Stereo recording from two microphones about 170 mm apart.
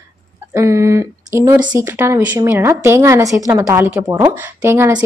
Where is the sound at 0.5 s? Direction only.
15° right (ahead or behind).